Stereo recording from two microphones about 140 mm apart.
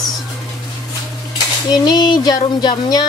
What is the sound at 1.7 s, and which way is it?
Speech, 30° left (ahead or behind).